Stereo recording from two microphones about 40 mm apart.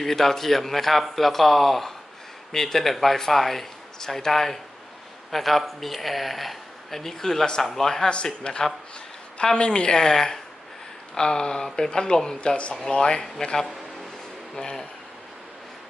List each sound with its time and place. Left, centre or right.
0.0 s speech: centre
8.1 s speech: left
12.4 s speech: left